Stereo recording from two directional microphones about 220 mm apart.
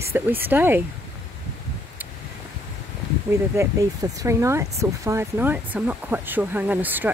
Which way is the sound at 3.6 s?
15° right (ahead or behind).